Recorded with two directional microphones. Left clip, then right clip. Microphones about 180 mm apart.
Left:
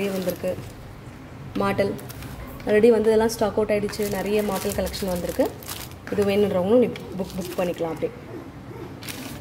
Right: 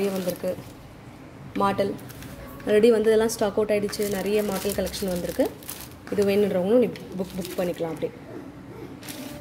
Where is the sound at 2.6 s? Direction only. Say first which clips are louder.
Left 1 dB; 20° right (ahead or behind).